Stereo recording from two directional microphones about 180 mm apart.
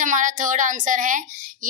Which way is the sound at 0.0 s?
45° right (ahead or behind).